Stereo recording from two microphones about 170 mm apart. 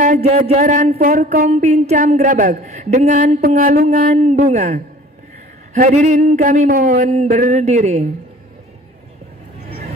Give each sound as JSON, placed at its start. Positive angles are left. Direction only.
{"t": 0.2, "sound": "speech", "side_deg": -35}
{"t": 0.9, "sound": "a sound", "side_deg": -55}
{"t": 1.5, "sound": "speech", "side_deg": -40}
{"t": 3.2, "sound": "a sound", "side_deg": -60}
{"t": 4.2, "sound": "speech", "side_deg": -45}
{"t": 5.9, "sound": "speech", "side_deg": -45}
{"t": 7.1, "sound": "speech", "side_deg": -40}